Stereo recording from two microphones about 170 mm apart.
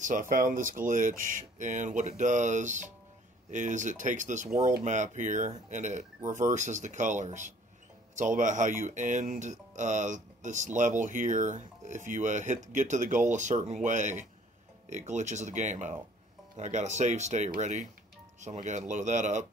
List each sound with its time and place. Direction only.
0.0 s speech: 50° right (ahead or behind)